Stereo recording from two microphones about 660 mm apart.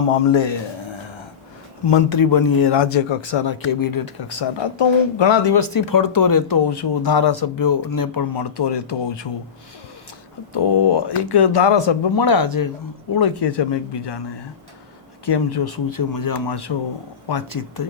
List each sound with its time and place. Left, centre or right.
1.9 s speech: left
10.5 s speech: left
15.3 s speech: left